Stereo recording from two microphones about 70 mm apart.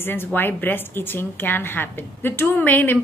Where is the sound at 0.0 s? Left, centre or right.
Left.